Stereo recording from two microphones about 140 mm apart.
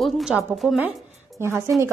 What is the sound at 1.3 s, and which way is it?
Speech, 20° right (ahead or behind).